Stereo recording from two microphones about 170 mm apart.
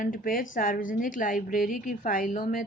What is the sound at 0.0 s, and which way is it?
A woman's voice, 55° left (ahead or behind).